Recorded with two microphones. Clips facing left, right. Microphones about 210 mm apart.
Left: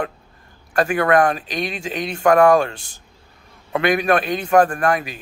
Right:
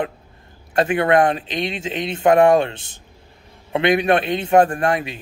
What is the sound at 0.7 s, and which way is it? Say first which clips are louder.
A man's voice: even; 25° right (ahead or behind).